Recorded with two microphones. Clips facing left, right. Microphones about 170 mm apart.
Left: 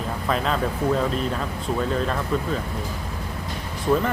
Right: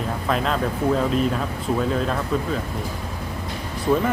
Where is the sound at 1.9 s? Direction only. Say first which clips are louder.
Right 1 dB; centre (ahead or behind).